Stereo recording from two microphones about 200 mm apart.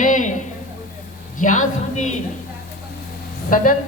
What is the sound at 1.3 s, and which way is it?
Speech, 40° left (ahead or behind).